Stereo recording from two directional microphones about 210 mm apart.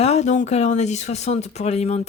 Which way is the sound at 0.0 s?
30° left (ahead or behind).